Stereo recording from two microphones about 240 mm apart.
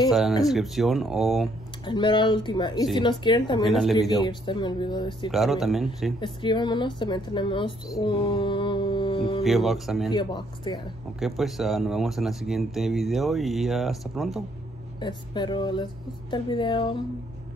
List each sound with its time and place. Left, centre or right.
0.5 s speech: centre
1.9 s speech: centre
3.6 s speech: centre
4.2 s speech: centre
5.3 s speech: centre
6.2 s a woman's voice: centre
9.4 s speech: centre
10.1 s speech: centre
11.1 s speech: centre
15.0 s speech: centre